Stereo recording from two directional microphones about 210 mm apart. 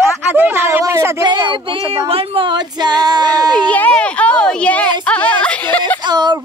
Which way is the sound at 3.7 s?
5° left (ahead or behind).